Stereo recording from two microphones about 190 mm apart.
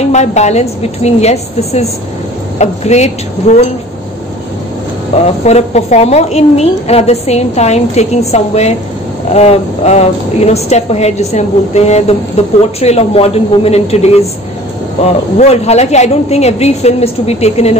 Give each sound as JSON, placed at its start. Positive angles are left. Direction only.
{"t": 0.1, "sound": "a woman's voice", "side_deg": 35}
{"t": 5.4, "sound": "a woman's voice", "side_deg": 35}
{"t": 15.3, "sound": "a woman's voice", "side_deg": 35}